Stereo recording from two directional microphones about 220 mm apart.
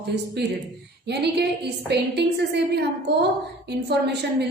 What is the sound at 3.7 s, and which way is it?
Speech, 50° right (ahead or behind).